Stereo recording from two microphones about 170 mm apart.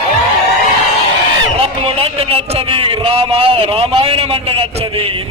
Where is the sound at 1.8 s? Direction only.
35° right (ahead or behind).